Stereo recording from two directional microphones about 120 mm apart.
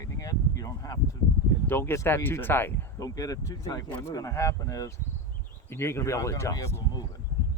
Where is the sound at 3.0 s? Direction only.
30° left (ahead or behind).